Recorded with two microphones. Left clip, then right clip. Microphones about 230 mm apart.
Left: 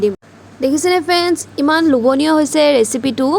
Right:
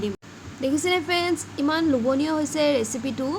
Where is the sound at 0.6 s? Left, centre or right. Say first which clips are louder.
Left 9 dB; left.